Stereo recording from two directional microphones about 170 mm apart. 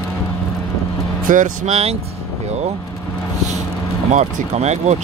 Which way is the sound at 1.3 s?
50° right (ahead or behind).